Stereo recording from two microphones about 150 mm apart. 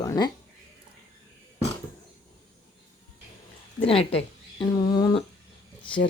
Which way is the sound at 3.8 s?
40° left (ahead or behind).